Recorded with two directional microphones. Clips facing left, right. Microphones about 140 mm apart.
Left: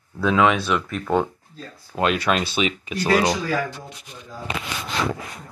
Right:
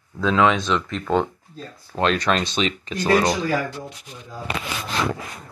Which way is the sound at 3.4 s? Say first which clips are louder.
Right 1 dB; 20° right (ahead or behind).